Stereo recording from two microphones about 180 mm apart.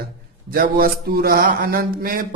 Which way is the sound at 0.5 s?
55° right (ahead or behind).